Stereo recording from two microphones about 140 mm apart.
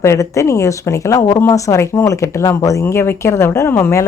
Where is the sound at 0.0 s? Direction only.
20° left (ahead or behind).